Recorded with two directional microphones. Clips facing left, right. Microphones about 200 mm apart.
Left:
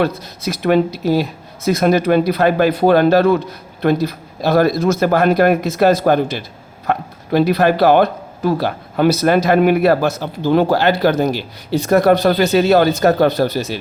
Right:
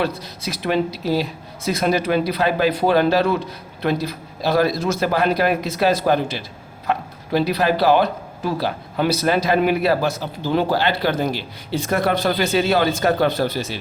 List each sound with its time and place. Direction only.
0.0 s speech: 50° left (ahead or behind)